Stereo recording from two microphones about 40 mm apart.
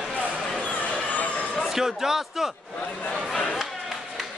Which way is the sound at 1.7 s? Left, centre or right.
Centre.